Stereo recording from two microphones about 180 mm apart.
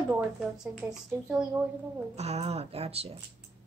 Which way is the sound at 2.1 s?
35° right (ahead or behind).